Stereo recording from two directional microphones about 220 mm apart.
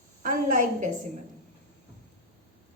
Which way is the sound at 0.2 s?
35° right (ahead or behind).